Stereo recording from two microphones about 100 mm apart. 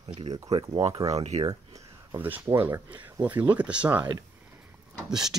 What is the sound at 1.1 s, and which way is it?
Speech, 90° right.